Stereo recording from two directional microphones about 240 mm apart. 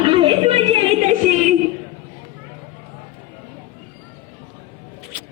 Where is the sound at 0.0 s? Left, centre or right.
Right.